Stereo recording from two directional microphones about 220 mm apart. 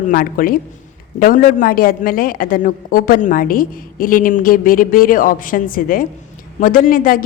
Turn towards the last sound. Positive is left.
turn(degrees=40)  # may be behind; listen again after turning